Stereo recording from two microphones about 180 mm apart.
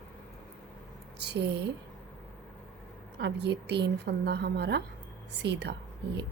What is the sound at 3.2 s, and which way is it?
A woman's voice, 70° right (ahead or behind).